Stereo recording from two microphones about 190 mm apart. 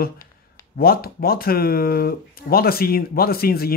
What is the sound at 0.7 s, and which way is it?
Speech, 50° left (ahead or behind).